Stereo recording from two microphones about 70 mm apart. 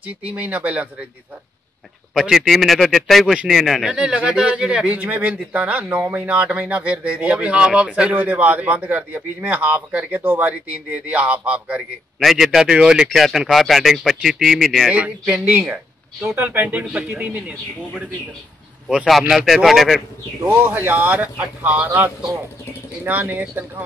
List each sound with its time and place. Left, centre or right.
0.0 s a man's voice: right
2.1 s speech: centre
4.0 s a man's voice: centre
12.2 s speech: centre
12.4 s speech: centre
14.9 s a man's voice: centre
16.2 s speech: right
16.4 s a man's voice: right
19.0 s speech: centre
20.4 s a man's voice: right
23.1 s a man's voice: right